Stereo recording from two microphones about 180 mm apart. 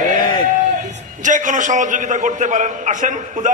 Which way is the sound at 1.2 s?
45° right (ahead or behind).